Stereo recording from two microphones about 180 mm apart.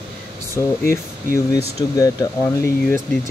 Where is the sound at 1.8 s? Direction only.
20° left (ahead or behind).